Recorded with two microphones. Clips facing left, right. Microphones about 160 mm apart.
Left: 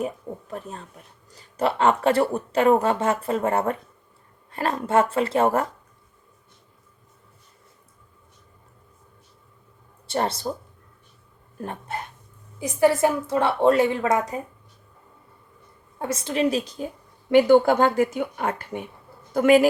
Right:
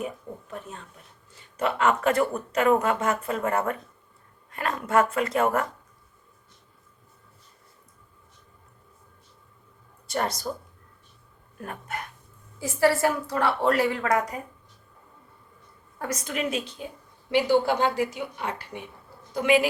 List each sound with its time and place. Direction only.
0.5 s a sound: 35° left (ahead or behind)
1.3 s a woman's voice: 35° left (ahead or behind)
10.1 s a woman's voice: 30° left (ahead or behind)
11.6 s a woman's voice: 30° left (ahead or behind)
16.0 s a woman's voice: 25° left (ahead or behind); by 19.6 s 45° left (ahead or behind)